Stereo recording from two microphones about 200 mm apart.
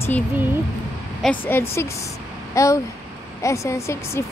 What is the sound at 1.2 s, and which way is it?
Speech, centre (ahead or behind).